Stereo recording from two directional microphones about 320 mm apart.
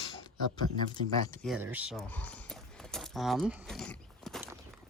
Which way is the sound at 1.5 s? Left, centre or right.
Centre.